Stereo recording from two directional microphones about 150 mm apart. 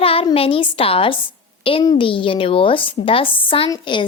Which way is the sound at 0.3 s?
40° left (ahead or behind).